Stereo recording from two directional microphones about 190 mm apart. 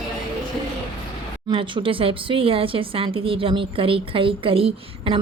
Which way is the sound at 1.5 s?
30° right (ahead or behind).